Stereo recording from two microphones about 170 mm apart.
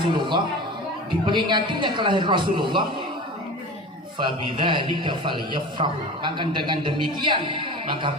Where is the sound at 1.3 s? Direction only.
25° right (ahead or behind).